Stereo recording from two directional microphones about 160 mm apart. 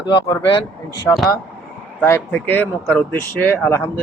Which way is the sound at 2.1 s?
10° left (ahead or behind).